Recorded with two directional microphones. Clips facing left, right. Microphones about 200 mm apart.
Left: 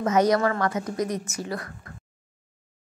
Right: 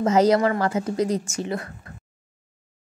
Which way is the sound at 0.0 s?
25° right (ahead or behind).